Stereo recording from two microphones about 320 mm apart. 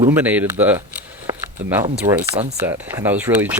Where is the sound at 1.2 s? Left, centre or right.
Centre.